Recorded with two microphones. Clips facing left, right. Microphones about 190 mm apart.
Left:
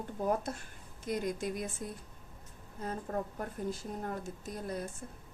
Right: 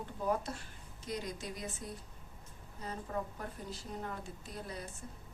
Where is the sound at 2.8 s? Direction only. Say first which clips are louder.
Left 3 dB; 50° left (ahead or behind).